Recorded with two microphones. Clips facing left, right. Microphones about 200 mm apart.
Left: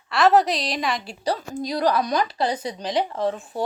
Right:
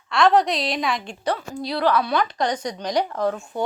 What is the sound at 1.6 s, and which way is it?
Speech, 40° left (ahead or behind).